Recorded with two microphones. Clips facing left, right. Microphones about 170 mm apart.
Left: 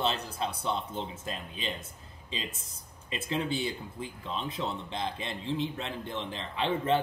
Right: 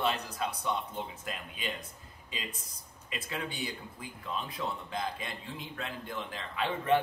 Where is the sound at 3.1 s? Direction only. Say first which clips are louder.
Left 7 dB; 25° left (ahead or behind).